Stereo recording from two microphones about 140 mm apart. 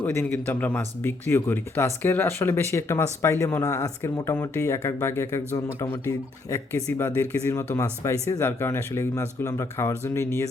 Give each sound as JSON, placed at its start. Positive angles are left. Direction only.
{"t": 0.0, "sound": "speech", "side_deg": 15}